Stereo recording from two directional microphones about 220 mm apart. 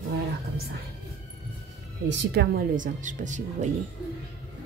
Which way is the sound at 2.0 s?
45° right (ahead or behind).